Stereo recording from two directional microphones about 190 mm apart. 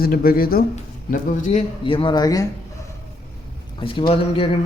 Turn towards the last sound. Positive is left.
turn(degrees=25)  # may be behind; listen again after turning